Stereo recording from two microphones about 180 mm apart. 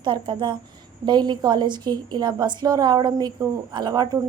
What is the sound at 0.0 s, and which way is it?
A woman's voice, 25° right (ahead or behind).